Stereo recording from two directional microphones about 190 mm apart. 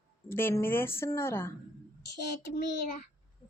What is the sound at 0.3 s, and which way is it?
A woman's voice, 10° left (ahead or behind).